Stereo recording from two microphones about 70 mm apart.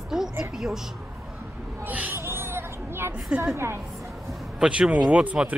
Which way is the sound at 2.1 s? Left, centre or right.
Right.